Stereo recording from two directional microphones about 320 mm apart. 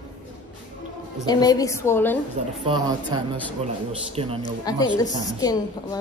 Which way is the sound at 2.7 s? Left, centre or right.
Centre.